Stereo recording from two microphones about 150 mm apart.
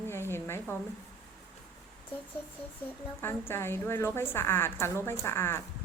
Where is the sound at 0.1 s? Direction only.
15° left (ahead or behind).